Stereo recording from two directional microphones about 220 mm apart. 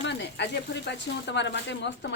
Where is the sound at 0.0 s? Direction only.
50° left (ahead or behind).